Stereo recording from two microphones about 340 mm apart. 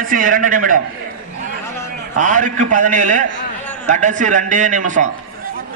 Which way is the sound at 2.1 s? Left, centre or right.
Right.